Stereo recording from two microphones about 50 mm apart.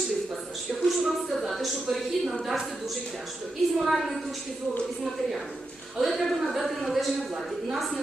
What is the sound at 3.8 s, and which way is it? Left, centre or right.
Speech, centre.